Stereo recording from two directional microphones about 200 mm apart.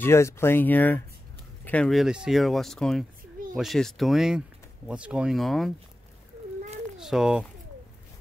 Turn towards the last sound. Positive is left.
turn(degrees=-5)  # may be behind; listen again after turning